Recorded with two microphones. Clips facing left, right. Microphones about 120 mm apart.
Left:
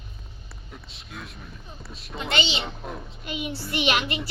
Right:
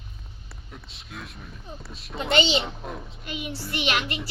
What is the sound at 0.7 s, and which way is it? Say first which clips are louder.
Speech: even; centre (ahead or behind).